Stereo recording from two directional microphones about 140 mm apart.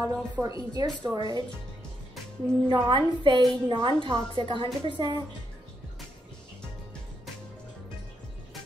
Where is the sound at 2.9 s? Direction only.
35° right (ahead or behind).